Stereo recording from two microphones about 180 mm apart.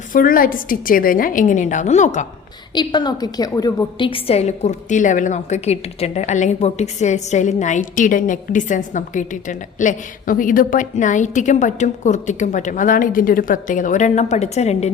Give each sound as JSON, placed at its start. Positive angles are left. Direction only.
{"t": 0.1, "sound": "a woman's voice", "side_deg": 50}
{"t": 2.7, "sound": "a woman's voice", "side_deg": 25}